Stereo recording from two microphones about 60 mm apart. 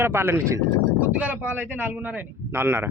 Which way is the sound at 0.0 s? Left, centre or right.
Right.